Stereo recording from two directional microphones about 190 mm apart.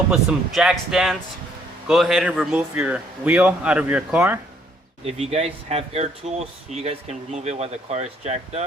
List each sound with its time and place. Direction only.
0.1 s a man's voice: centre (ahead or behind)
5.0 s speech: 35° right (ahead or behind)